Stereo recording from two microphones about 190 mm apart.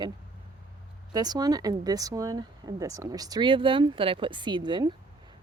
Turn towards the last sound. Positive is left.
turn(degrees=-25)  # may be behind; listen again after turning